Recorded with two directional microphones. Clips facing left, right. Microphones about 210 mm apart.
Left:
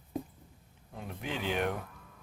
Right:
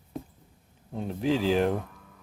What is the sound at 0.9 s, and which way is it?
Speech, 30° right (ahead or behind).